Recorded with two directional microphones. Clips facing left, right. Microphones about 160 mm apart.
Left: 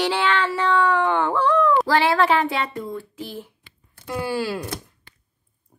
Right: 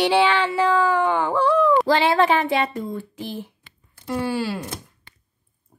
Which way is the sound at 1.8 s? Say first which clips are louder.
Right 1 dB; 20° right (ahead or behind).